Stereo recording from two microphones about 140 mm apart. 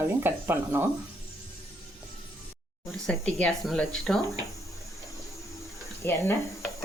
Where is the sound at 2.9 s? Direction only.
5° left (ahead or behind).